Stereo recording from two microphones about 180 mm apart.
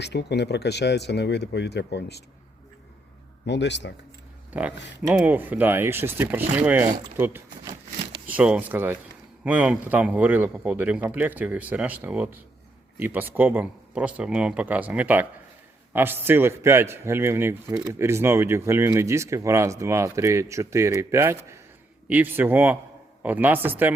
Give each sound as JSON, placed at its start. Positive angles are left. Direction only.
{"t": 0.0, "sound": "speech", "side_deg": 70}
{"t": 3.4, "sound": "speech", "side_deg": 75}
{"t": 4.5, "sound": "a man's voice", "side_deg": -10}